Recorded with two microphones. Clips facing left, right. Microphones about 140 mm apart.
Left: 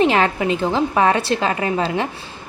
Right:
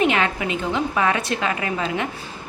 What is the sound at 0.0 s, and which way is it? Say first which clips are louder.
A woman's voice: left 4 dB; 35° left (ahead or behind).